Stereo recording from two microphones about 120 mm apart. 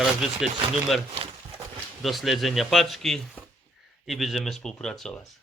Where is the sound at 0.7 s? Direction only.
Centre (ahead or behind).